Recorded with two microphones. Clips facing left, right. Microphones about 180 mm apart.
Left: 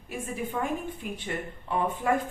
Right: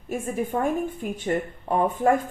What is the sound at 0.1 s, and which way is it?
Speech, 45° right (ahead or behind).